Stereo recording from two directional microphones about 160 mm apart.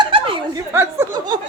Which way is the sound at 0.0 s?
30° right (ahead or behind).